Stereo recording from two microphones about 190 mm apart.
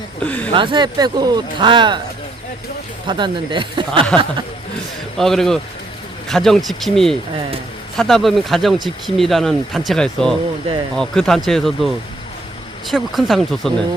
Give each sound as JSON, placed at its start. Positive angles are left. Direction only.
{"t": 0.2, "sound": "speech", "side_deg": 10}
{"t": 0.5, "sound": "speech", "side_deg": -25}
{"t": 3.1, "sound": "speech", "side_deg": -25}
{"t": 5.1, "sound": "speech", "side_deg": 0}
{"t": 12.9, "sound": "speech", "side_deg": 0}